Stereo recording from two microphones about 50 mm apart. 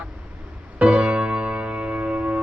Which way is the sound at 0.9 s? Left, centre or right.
Right.